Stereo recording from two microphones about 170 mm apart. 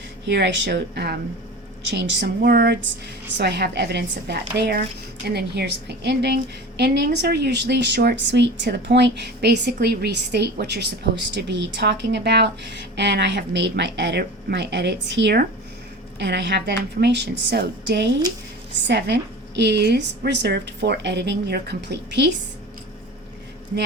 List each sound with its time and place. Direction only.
0.3 s a woman's voice: 90° right; by 1.2 s 75° right (ahead or behind)
1.8 s a woman's voice: 90° right